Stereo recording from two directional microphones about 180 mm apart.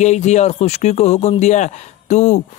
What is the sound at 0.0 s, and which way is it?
Speech, 40° left (ahead or behind).